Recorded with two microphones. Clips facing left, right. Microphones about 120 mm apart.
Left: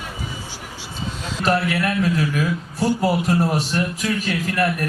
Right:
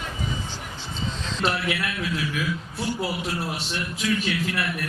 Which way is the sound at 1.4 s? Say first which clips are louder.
Left 6 dB; 40° left (ahead or behind).